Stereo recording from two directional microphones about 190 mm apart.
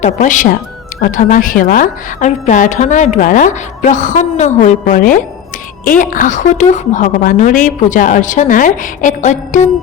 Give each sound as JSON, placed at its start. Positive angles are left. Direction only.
{"t": 0.0, "sound": "a woman's voice", "side_deg": 40}